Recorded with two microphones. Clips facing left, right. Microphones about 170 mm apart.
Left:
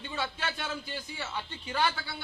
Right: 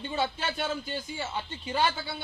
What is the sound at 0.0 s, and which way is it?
Speech, 30° right (ahead or behind).